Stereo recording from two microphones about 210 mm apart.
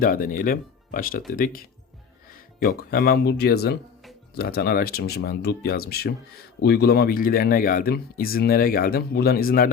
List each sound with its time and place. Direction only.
0.0 s speech: 40° left (ahead or behind)